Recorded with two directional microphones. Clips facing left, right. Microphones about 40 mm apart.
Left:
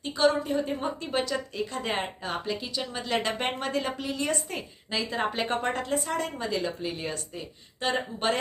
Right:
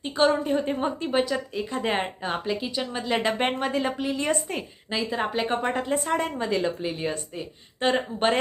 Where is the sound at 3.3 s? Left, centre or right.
Right.